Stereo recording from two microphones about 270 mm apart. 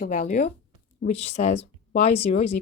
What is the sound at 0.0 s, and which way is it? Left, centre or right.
Speech, left.